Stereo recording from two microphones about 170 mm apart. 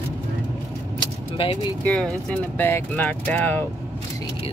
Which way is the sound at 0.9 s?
30° left (ahead or behind).